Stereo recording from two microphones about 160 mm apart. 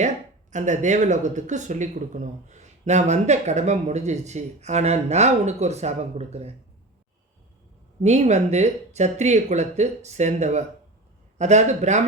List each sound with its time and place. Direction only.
0.5 s speech: 50° right (ahead or behind)
8.0 s speech: 45° right (ahead or behind)